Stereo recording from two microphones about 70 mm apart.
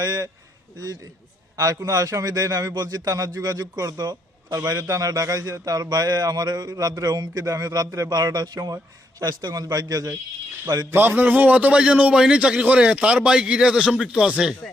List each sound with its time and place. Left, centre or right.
0.0 s a man's voice: right
1.5 s a man's voice: right
4.6 s a man's voice: right
8.7 s a man's voice: right
10.8 s a man's voice: right; by 14.5 s centre